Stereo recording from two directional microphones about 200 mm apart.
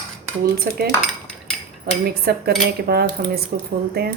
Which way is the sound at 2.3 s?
50° right (ahead or behind).